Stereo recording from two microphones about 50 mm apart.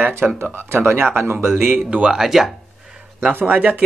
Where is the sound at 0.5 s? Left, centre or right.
Right.